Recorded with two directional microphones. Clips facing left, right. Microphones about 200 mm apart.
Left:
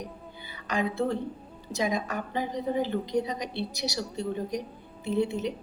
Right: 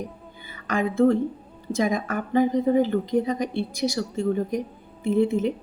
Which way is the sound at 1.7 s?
50° right (ahead or behind).